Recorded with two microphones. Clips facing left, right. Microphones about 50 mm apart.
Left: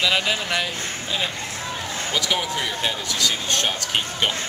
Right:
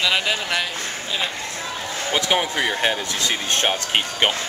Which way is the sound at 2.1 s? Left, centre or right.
Right.